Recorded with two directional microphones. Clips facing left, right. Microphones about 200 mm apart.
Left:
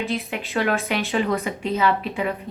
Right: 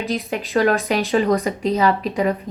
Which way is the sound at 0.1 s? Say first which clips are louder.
Right 4 dB; 40° right (ahead or behind).